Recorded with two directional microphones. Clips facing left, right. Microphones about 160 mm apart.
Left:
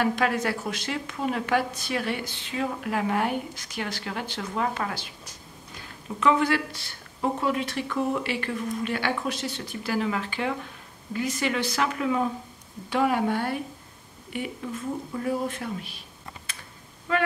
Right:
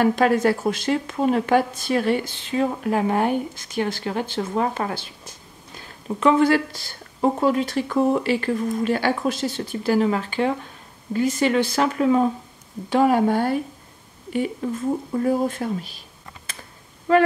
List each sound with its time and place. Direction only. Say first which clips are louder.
0.0 s speech: right 7 dB; 35° right (ahead or behind)
6.1 s speech: right 6 dB; 35° right (ahead or behind)
14.6 s speech: right 7 dB; 40° right (ahead or behind)
17.1 s speech: right 9 dB; 40° right (ahead or behind)